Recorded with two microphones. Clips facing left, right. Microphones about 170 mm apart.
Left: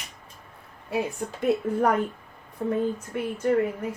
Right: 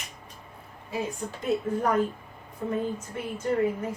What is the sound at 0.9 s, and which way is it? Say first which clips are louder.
Speech: left 4 dB; 65° left (ahead or behind).